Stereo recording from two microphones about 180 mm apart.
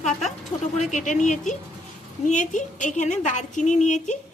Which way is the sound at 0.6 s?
40° left (ahead or behind).